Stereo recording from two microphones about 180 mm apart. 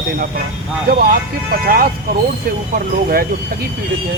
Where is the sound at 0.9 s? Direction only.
55° right (ahead or behind).